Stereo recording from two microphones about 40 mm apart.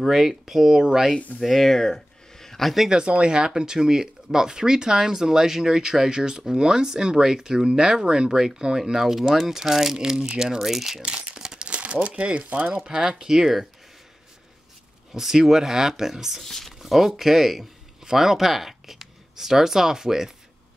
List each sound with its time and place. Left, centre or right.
0.1 s speech: centre
1.4 s a sound: centre
2.9 s speech: right; by 11.0 s centre
11.0 s crumpling: right
12.2 s speech: right
12.8 s speech: centre
15.1 s speech: centre
16.4 s speech: centre
16.8 s speech: centre